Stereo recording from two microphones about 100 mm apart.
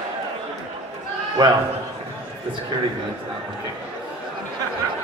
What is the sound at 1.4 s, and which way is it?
Speech, 40° right (ahead or behind).